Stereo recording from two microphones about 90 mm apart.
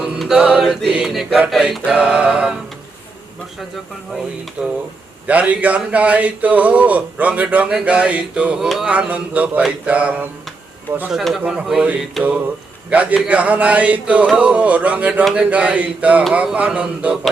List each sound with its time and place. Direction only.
0.0 s mantra: 5° right (ahead or behind)
1.0 s speech: 5° right (ahead or behind)
4.6 s speech: 10° right (ahead or behind)
11.1 s speech: centre (ahead or behind)
12.9 s speech: 15° right (ahead or behind)